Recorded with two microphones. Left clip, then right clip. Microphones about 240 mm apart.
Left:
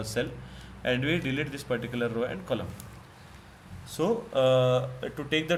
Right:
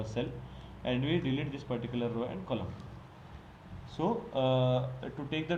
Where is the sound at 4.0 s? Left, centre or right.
Left.